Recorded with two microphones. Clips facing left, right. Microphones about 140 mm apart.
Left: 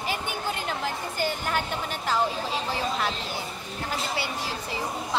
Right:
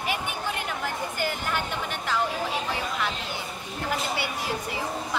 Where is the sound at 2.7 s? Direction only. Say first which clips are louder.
Left 1 dB; 35° left (ahead or behind).